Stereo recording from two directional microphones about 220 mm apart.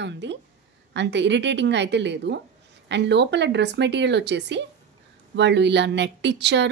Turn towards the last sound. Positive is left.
turn(degrees=-50)  # may be behind; listen again after turning